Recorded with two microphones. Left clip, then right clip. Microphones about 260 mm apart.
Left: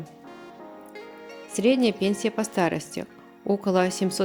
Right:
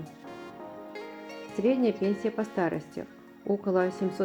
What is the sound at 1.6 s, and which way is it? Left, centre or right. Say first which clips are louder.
Speech: left 4 dB; left.